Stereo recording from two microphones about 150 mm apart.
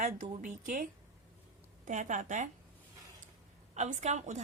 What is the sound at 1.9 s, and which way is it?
Speech, 55° right (ahead or behind).